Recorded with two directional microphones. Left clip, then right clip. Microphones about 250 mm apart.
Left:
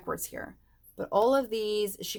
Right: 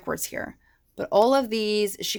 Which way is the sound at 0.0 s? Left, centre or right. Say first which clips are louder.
Right 6 dB; right.